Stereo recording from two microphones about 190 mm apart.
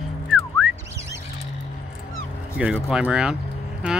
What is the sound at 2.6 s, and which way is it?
Speech, 5° right (ahead or behind).